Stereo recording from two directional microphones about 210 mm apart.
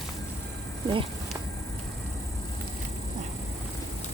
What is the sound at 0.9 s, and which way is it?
Speech, 25° right (ahead or behind).